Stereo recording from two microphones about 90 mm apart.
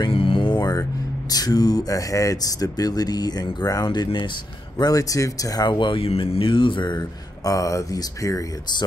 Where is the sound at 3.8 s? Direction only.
60° left (ahead or behind).